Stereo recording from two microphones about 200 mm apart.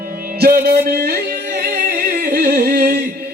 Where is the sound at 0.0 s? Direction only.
50° right (ahead or behind).